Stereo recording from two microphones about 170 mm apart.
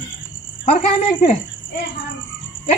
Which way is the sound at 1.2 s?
45° left (ahead or behind).